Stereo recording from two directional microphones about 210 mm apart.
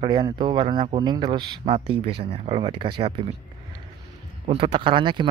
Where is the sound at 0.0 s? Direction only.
20° right (ahead or behind).